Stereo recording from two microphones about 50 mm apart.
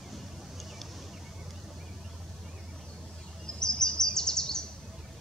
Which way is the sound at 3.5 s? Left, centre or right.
Centre.